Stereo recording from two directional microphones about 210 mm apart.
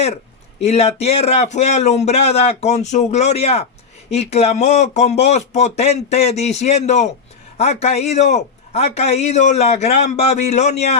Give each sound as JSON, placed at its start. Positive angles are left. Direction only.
{"t": 0.6, "sound": "a man's voice", "side_deg": 30}